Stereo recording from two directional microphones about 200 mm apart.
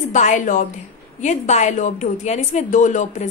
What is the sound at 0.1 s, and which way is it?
A woman's voice, 40° left (ahead or behind).